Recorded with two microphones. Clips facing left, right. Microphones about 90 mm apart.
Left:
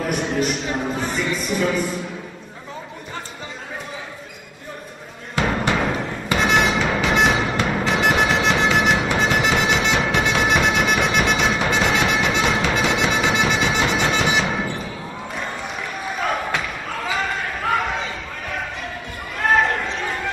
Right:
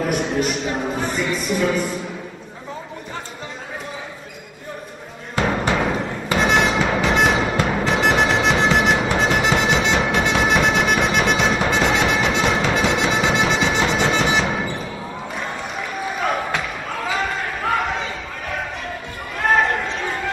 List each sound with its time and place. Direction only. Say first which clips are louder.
0.0 s speech: right 1 dB; centre (ahead or behind)
5.3 s music: right 1 dB; centre (ahead or behind)
16.9 s basketball bounce: right 1 dB; centre (ahead or behind)
19.4 s basketball bounce: even; centre (ahead or behind)